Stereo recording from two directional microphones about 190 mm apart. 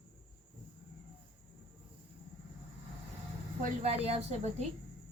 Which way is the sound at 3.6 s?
35° right (ahead or behind).